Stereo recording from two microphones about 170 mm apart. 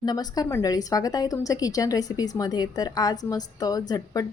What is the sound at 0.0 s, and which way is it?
A woman's voice, 25° left (ahead or behind).